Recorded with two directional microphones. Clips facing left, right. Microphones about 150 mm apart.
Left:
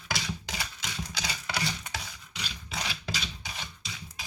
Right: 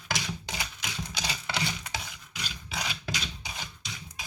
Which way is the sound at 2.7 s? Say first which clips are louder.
Right 1 dB; 5° right (ahead or behind).